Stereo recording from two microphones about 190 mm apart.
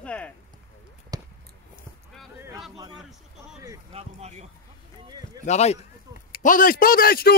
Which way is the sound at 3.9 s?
35° right (ahead or behind).